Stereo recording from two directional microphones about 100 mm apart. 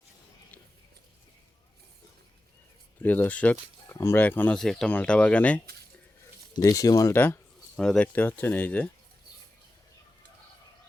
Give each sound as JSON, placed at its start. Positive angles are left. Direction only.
{"t": 3.0, "sound": "speech", "side_deg": 20}
{"t": 3.8, "sound": "speech", "side_deg": 25}
{"t": 4.5, "sound": "speech", "side_deg": 5}
{"t": 6.7, "sound": "speech", "side_deg": 35}
{"t": 7.1, "sound": "speech", "side_deg": 25}
{"t": 7.8, "sound": "speech", "side_deg": 10}